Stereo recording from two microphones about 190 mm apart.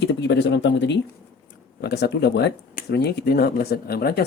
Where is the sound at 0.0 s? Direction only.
65° left (ahead or behind).